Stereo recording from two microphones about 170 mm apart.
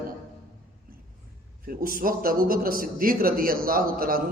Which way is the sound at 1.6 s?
60° right (ahead or behind).